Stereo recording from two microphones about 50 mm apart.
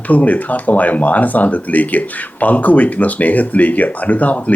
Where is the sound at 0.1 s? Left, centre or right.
Left.